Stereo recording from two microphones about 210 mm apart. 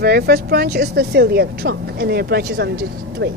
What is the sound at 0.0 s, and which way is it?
A woman's voice, 50° right (ahead or behind).